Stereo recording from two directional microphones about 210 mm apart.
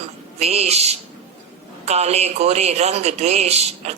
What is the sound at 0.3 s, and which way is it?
A man's voice, 30° right (ahead or behind).